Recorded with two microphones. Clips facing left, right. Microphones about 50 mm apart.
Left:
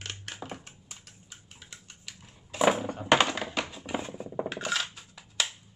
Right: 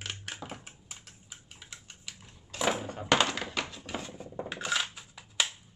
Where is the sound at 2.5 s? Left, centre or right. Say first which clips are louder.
Left 6 dB; centre.